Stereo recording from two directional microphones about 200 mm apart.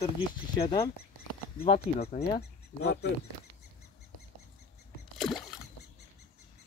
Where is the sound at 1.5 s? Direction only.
30° left (ahead or behind).